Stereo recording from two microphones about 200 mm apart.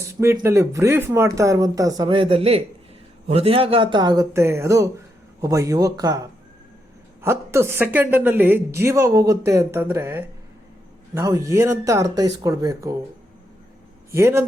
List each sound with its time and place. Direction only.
0.1 s a woman's voice: 15° right (ahead or behind)
14.1 s a woman's voice: 15° right (ahead or behind)